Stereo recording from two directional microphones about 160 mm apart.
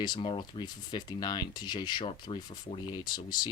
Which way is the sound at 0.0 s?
30° left (ahead or behind).